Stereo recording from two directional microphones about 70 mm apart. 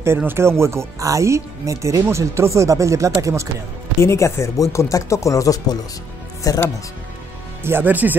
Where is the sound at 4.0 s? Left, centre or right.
Left.